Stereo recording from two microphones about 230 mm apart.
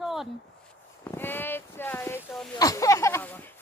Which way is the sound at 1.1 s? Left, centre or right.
Centre.